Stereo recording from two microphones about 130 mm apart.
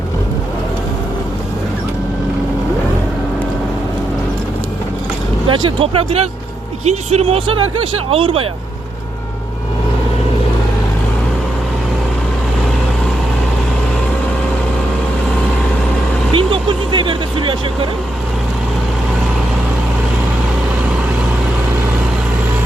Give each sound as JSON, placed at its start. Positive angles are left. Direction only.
{"t": 5.5, "sound": "speech", "side_deg": -40}
{"t": 16.3, "sound": "vehicle", "side_deg": -40}